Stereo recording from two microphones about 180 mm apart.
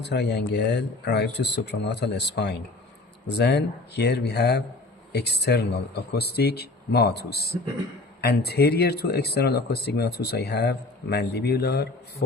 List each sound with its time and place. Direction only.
0.0 s speech: 70° left (ahead or behind)